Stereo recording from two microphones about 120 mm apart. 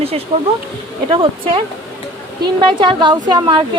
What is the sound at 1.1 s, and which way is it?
Speech, 45° right (ahead or behind).